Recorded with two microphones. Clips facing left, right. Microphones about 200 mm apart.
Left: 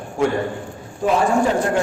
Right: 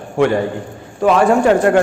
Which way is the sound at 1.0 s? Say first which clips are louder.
Right 6 dB; 75° right (ahead or behind).